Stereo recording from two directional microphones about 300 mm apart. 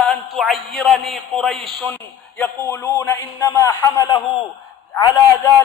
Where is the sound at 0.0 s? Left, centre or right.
Centre.